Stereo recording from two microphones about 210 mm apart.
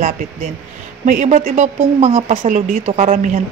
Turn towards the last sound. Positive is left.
turn(degrees=-35)  # may be behind; listen again after turning